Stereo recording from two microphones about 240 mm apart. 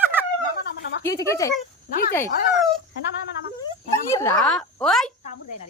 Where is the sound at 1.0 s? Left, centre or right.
Centre.